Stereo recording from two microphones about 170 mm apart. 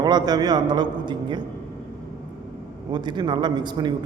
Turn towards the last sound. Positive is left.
turn(degrees=-25)  # may be behind; listen again after turning